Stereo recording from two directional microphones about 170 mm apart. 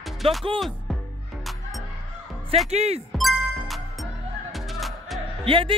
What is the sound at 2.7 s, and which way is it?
Speech, 40° right (ahead or behind).